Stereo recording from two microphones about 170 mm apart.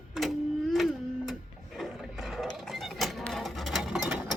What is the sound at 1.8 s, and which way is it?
Sewing machine, centre (ahead or behind).